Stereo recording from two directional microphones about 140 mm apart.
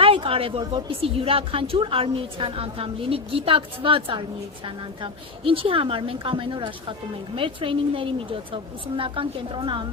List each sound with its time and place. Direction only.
0.0 s a sound: 40° right (ahead or behind)
0.6 s a woman's voice: 40° right (ahead or behind)
5.5 s a woman's voice: 40° right (ahead or behind)